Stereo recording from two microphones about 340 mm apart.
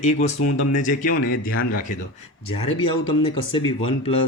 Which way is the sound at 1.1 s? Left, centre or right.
Left.